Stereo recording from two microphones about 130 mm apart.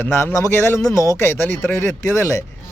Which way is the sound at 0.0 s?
15° left (ahead or behind).